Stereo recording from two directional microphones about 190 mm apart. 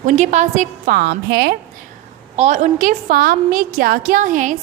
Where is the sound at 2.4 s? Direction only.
40° right (ahead or behind).